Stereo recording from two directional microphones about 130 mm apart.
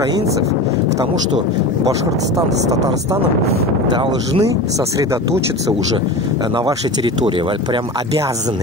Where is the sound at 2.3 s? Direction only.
25° right (ahead or behind).